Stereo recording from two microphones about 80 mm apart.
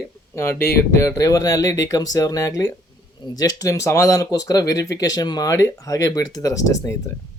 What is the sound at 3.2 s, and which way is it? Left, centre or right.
Speech, left.